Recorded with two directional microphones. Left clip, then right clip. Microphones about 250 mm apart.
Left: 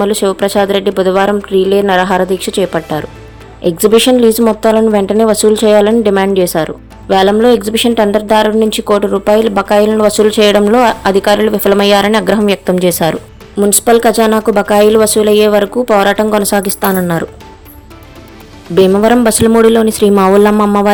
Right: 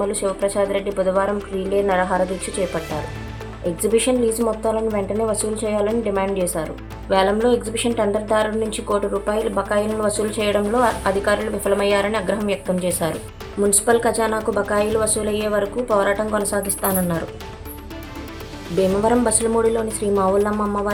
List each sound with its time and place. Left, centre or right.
0.0 s speech: left
19.0 s speech: left